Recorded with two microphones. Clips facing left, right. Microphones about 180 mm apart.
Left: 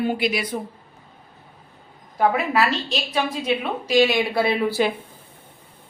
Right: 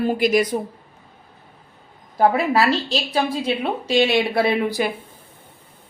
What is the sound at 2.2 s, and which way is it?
A woman's voice, 35° right (ahead or behind).